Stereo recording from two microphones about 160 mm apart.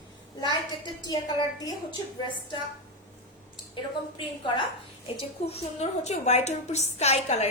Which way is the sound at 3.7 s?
30° left (ahead or behind).